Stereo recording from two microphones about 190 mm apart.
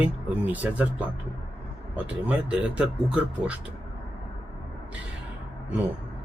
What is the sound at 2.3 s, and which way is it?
Speech, 5° right (ahead or behind).